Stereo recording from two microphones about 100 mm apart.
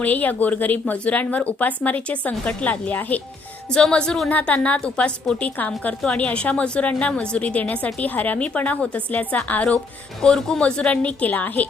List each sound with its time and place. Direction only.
0.0 s a woman's voice: 15° left (ahead or behind)